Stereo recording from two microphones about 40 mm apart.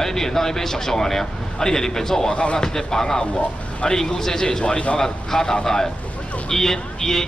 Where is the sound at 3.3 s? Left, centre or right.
Left.